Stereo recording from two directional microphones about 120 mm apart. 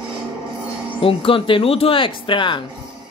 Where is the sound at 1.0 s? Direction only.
50° left (ahead or behind).